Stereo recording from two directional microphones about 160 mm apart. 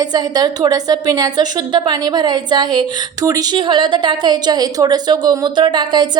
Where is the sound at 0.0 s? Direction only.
25° right (ahead or behind).